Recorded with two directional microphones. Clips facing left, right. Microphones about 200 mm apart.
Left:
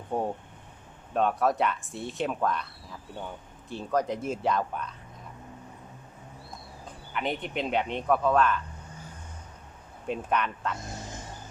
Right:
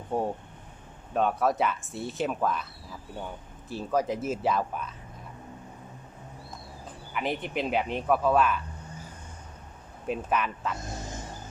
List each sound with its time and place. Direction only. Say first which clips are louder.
0.1 s speech: right 1 dB; centre (ahead or behind)
6.8 s speech: even; 5° right (ahead or behind)
10.1 s speech: even; 5° right (ahead or behind)